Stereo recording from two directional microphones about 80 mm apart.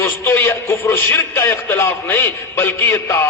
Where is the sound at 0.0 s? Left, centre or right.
Left.